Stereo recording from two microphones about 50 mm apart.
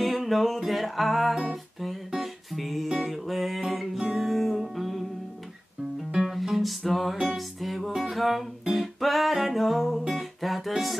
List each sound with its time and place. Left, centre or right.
0.0 s music: centre
6.1 s music: centre